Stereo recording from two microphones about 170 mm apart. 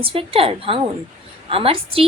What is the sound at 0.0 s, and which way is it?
A woman's voice, 35° right (ahead or behind).